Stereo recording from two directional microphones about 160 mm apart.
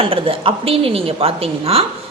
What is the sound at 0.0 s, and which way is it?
A woman's voice, 35° right (ahead or behind).